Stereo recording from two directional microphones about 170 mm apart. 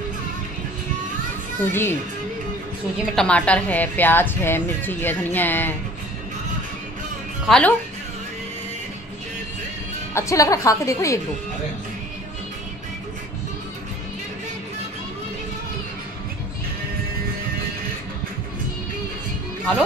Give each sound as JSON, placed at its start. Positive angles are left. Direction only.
{"t": 1.6, "sound": "a woman's voice", "side_deg": 15}
{"t": 3.2, "sound": "a woman's voice", "side_deg": 5}
{"t": 7.4, "sound": "speech", "side_deg": 5}
{"t": 10.1, "sound": "a woman's voice", "side_deg": 20}